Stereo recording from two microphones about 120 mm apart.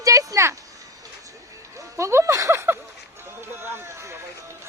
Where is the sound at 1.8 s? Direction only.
25° right (ahead or behind).